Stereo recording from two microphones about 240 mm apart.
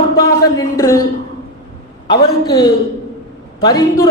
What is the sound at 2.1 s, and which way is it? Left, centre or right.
Speech, centre.